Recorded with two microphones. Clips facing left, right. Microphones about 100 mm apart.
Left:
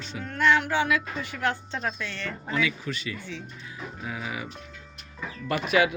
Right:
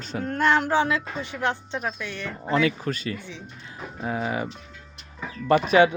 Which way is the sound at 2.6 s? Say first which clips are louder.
Right 5 dB; 45° right (ahead or behind).